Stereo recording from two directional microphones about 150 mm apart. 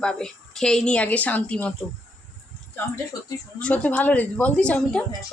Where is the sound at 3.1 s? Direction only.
30° left (ahead or behind).